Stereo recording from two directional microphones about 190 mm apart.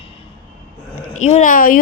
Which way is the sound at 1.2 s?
40° left (ahead or behind).